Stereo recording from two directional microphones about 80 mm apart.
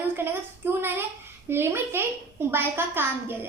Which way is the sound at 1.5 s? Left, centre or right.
Right.